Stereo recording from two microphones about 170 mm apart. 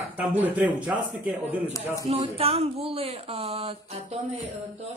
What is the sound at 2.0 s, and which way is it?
Speech, 35° right (ahead or behind).